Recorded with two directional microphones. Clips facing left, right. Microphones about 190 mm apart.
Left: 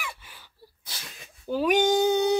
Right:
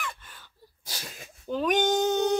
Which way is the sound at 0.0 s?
10° left (ahead or behind).